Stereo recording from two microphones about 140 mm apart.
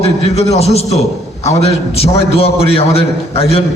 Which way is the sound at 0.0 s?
50° left (ahead or behind).